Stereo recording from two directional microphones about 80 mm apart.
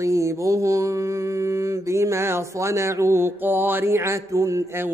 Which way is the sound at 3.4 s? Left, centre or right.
Right.